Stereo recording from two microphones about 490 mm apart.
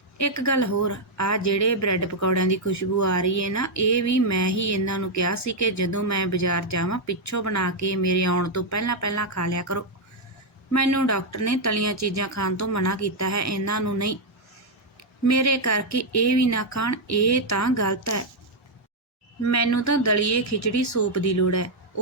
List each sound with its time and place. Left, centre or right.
0.2 s speech: left
15.2 s speech: left
19.4 s speech: left